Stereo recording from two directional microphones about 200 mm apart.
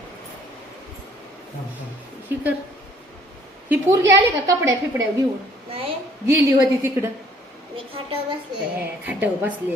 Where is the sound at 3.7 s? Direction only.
15° right (ahead or behind).